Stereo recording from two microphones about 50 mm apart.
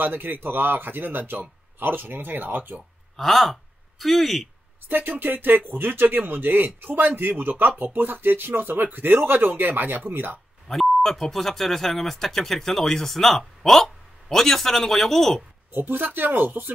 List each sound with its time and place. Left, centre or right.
0.0 s speech: right
3.2 s speech: centre
4.8 s speech: right
10.7 s speech: centre
15.7 s speech: right